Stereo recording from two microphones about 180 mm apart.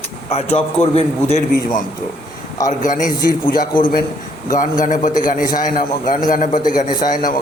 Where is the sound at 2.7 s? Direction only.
45° left (ahead or behind).